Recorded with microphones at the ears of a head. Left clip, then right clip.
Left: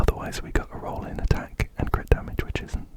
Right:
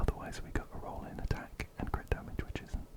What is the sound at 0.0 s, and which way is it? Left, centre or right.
Whispering, left.